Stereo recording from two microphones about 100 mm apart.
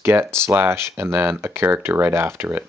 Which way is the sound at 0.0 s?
25° right (ahead or behind).